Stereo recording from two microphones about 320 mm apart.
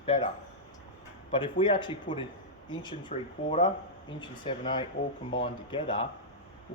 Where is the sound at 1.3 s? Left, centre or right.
Centre.